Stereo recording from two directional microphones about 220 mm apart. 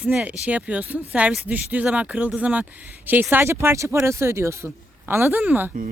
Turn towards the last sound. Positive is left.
turn(degrees=-10)  # may be behind; listen again after turning